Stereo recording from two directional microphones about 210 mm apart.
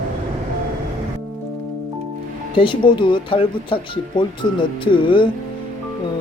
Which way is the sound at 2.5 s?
25° left (ahead or behind).